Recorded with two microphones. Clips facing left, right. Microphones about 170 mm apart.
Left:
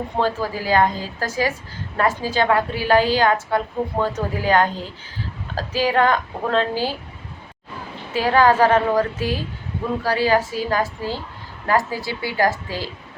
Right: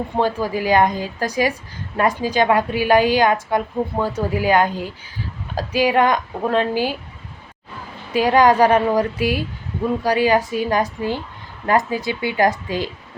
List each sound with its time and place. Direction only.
0.2 s a woman's voice: 15° right (ahead or behind)
8.1 s a woman's voice: 15° right (ahead or behind)